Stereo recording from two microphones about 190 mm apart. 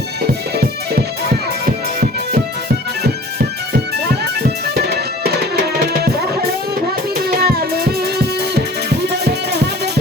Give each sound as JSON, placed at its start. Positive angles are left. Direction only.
{"t": 0.2, "sound": "music", "side_deg": -55}
{"t": 4.7, "sound": "music", "side_deg": -55}
{"t": 7.3, "sound": "music", "side_deg": -55}